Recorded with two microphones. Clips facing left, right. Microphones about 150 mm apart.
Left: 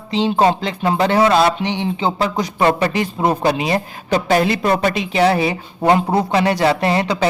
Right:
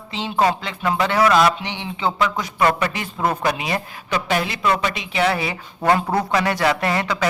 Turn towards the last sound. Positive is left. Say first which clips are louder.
# left 4 dB
turn(degrees=30)  # may be behind; listen again after turning